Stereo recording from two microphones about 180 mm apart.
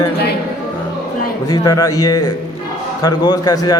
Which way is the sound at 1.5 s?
20° left (ahead or behind).